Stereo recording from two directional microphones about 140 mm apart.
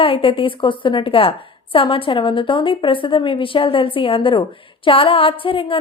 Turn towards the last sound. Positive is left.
turn(degrees=40)  # may be behind; listen again after turning